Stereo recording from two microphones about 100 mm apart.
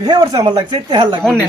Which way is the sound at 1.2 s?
5° left (ahead or behind).